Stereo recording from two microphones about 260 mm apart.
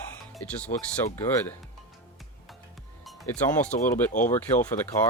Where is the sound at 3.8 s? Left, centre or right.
Centre.